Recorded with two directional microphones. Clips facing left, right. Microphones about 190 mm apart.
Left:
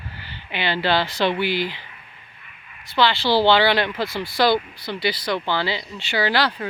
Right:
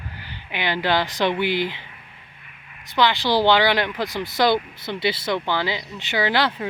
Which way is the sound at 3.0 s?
15° right (ahead or behind).